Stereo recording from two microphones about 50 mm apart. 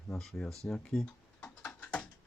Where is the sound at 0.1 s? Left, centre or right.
Centre.